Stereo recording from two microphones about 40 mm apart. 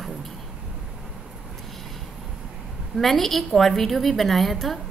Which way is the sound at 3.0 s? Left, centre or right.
Centre.